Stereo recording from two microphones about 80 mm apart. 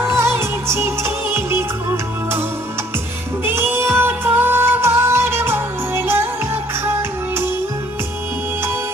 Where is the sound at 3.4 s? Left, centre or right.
Right.